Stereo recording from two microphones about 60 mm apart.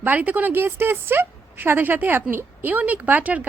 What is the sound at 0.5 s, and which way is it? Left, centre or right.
Speech, right.